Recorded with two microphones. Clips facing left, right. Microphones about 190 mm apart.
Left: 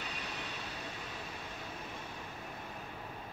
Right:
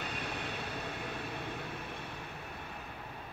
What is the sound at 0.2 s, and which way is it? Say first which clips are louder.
Train: right 4 dB; 60° right (ahead or behind).